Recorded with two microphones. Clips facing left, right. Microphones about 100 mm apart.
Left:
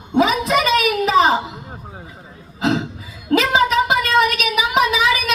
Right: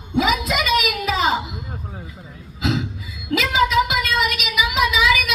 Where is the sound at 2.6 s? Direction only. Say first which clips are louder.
Left 4 dB; 40° left (ahead or behind).